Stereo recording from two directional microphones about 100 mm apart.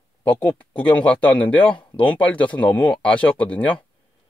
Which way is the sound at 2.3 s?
15° left (ahead or behind).